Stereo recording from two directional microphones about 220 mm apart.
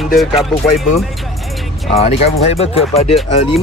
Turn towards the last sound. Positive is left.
turn(degrees=30)  # may be behind; listen again after turning